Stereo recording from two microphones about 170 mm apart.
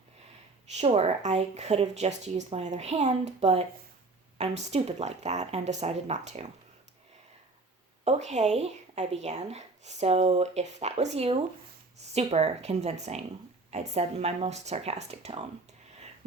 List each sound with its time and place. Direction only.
0.7 s speech: 40° right (ahead or behind)
8.0 s speech: 40° right (ahead or behind)